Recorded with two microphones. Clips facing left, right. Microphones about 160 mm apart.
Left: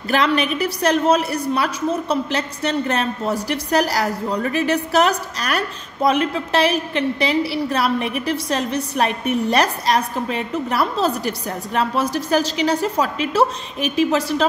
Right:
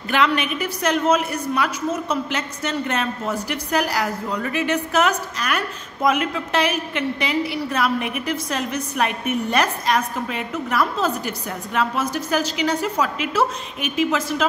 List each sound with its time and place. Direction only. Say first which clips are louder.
0.1 s a woman's voice: left 2 dB; 35° left (ahead or behind)